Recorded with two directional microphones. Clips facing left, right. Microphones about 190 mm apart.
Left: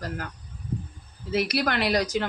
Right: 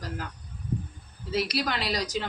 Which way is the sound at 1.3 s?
55° left (ahead or behind).